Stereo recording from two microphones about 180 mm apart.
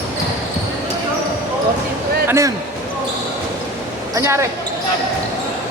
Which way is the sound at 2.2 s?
15° right (ahead or behind).